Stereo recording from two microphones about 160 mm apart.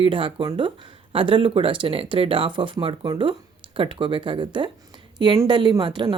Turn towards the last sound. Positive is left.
turn(degrees=-30)  # may be behind; listen again after turning